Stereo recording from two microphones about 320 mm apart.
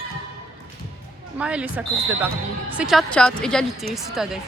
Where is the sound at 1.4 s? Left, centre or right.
Centre.